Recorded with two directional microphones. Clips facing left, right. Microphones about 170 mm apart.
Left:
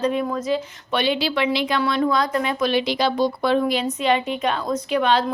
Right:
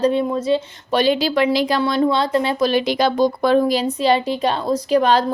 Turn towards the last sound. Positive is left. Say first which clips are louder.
# right 4 dB
turn(degrees=-40)  # may be behind; listen again after turning